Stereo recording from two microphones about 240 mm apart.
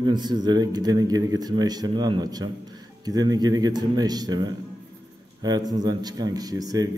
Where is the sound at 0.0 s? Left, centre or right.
Centre.